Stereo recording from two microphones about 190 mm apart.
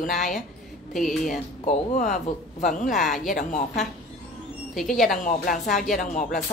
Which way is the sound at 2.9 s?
Centre (ahead or behind).